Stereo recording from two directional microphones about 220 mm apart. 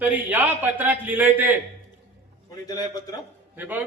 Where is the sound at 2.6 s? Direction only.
15° left (ahead or behind).